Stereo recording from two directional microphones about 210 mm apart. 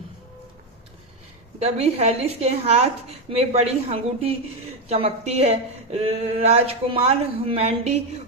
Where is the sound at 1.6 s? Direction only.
30° right (ahead or behind).